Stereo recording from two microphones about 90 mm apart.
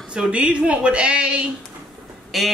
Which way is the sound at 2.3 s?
Centre (ahead or behind).